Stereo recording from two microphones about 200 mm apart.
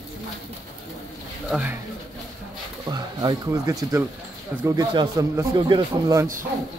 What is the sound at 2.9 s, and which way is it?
Speech, 20° right (ahead or behind).